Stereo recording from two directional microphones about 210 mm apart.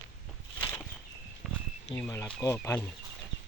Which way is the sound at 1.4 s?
Centre (ahead or behind).